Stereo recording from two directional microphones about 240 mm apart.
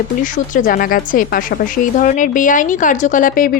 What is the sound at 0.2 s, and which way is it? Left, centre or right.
Speech, left.